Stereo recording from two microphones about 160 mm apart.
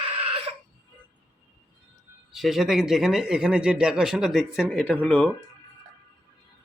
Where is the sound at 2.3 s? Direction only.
Centre (ahead or behind).